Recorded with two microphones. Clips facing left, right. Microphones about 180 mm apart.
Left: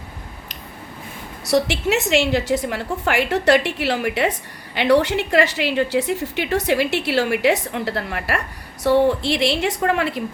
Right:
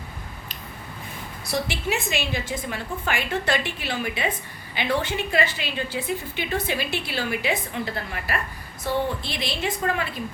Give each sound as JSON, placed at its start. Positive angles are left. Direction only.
{"t": 1.5, "sound": "a woman's voice", "side_deg": 75}